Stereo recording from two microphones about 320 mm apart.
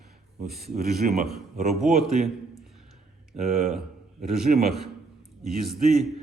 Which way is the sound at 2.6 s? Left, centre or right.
Centre.